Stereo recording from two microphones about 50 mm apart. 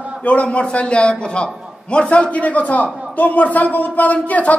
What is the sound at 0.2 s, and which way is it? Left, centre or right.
A man's voice, left.